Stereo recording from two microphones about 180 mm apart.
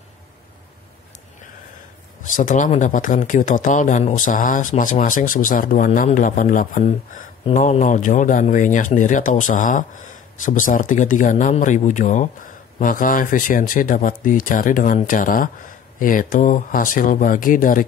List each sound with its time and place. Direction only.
2.3 s speech: 45° left (ahead or behind)